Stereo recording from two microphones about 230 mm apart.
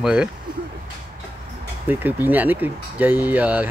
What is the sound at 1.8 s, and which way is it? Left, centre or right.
Speech, centre.